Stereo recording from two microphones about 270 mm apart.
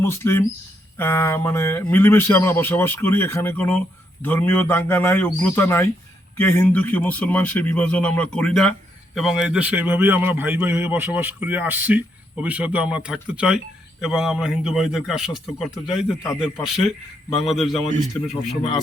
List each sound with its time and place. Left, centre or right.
0.0 s a man's voice: centre